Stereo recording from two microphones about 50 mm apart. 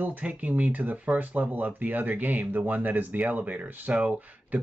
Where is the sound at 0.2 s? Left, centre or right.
Right.